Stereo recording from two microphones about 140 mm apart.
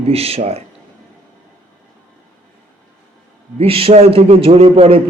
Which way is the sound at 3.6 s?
45° right (ahead or behind).